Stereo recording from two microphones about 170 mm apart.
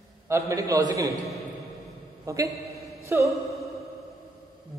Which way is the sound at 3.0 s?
15° right (ahead or behind).